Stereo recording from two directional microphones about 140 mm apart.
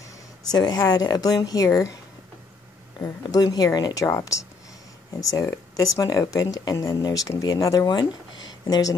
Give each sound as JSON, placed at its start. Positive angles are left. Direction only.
{"t": 0.5, "sound": "speech", "side_deg": 30}
{"t": 3.0, "sound": "speech", "side_deg": 25}